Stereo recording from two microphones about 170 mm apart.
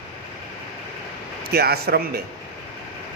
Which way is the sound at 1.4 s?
70° right (ahead or behind).